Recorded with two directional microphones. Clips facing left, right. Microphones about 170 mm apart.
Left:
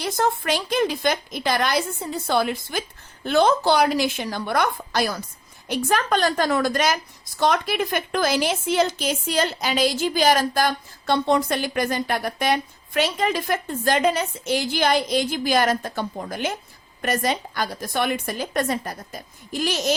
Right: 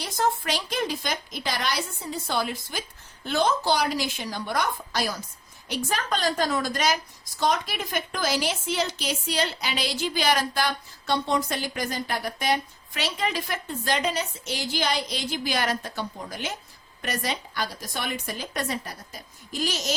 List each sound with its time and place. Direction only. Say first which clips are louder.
0.0 s a woman's voice: left 3 dB; 55° left (ahead or behind)